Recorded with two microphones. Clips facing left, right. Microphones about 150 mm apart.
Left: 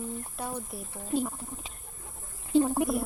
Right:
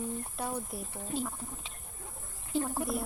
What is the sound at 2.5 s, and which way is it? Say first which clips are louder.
Speech: left 8 dB; 20° left (ahead or behind).